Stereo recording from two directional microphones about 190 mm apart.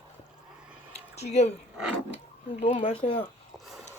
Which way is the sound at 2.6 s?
30° left (ahead or behind).